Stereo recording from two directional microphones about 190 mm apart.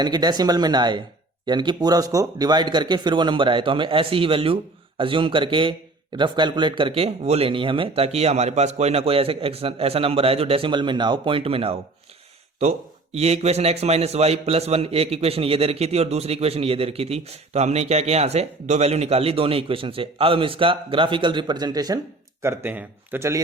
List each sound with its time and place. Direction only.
0.0 s a man's voice: 20° right (ahead or behind)
13.1 s a man's voice: 35° right (ahead or behind); by 23.4 s 15° right (ahead or behind)